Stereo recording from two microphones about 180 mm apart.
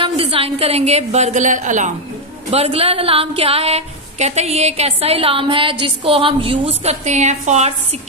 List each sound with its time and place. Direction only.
0.0 s a woman's voice: 30° right (ahead or behind)
2.5 s a woman's voice: 35° right (ahead or behind)